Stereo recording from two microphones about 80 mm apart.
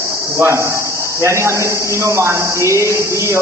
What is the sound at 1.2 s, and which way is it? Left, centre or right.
A man's voice, right.